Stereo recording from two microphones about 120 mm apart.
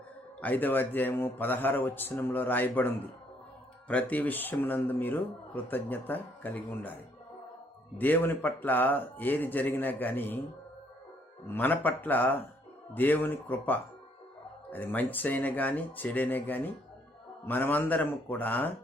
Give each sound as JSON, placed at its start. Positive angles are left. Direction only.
{"t": 0.4, "sound": "a man's voice", "side_deg": 15}
{"t": 7.9, "sound": "a man's voice", "side_deg": 15}
{"t": 11.4, "sound": "a man's voice", "side_deg": 15}